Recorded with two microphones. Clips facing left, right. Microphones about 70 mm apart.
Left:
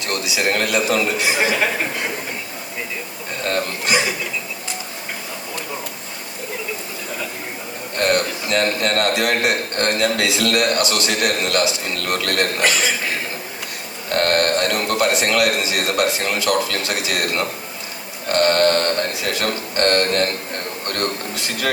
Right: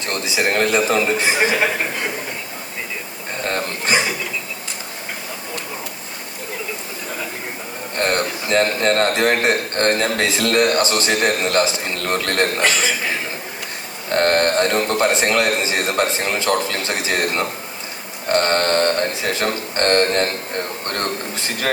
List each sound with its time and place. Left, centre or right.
0.0 s a man's voice: right
3.5 s chuckle: right
7.9 s a man's voice: right
14.1 s a man's voice: right